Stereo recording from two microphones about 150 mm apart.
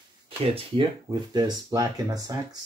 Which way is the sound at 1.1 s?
30° right (ahead or behind).